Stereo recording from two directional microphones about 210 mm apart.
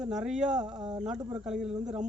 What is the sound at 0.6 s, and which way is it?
Speech, 20° right (ahead or behind).